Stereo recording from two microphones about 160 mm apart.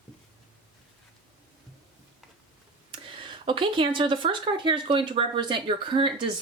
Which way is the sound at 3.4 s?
35° right (ahead or behind).